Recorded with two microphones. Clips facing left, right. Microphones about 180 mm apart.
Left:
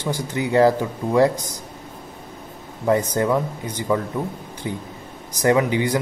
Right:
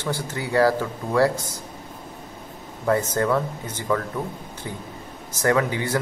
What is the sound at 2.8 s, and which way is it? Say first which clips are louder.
Speech: left 2 dB; 15° left (ahead or behind).